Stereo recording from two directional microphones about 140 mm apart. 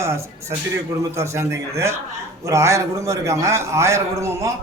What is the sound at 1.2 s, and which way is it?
A man's voice, 20° right (ahead or behind).